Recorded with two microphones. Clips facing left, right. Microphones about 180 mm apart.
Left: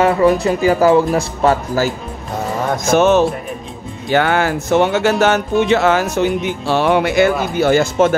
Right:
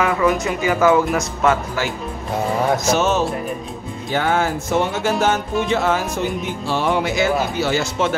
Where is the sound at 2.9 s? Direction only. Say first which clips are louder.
Left 10 dB; 60° left (ahead or behind).